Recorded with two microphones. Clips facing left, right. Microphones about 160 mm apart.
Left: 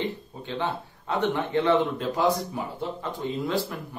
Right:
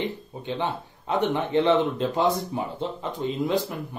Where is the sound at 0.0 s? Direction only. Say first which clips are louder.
Right 1 dB; 15° right (ahead or behind).